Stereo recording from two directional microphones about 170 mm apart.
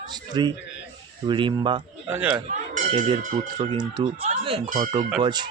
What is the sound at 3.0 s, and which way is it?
A man's voice, 25° right (ahead or behind).